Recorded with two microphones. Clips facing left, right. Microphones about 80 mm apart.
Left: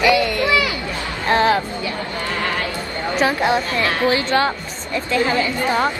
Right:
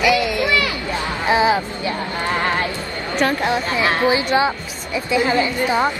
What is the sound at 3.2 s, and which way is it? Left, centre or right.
Speech, centre.